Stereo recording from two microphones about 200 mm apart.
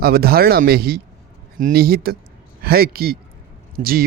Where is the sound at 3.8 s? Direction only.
35° right (ahead or behind).